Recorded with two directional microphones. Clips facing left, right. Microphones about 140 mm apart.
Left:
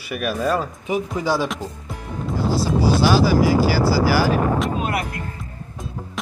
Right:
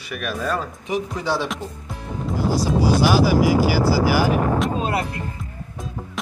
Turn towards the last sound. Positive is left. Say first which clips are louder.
# right 1 dB
turn(degrees=-30)  # may be behind; listen again after turning